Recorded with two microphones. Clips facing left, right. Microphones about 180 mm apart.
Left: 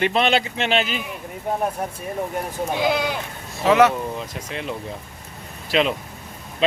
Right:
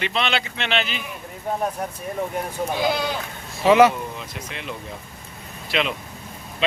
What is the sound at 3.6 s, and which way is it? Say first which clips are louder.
Speech: right 1 dB; centre (ahead or behind).